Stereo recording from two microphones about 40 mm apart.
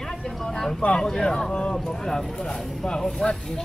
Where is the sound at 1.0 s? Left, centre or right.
Centre.